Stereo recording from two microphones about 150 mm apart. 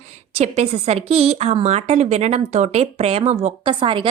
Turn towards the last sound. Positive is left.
turn(degrees=-35)  # may be behind; listen again after turning